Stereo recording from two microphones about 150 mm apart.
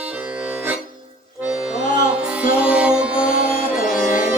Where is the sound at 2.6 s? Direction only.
10° right (ahead or behind).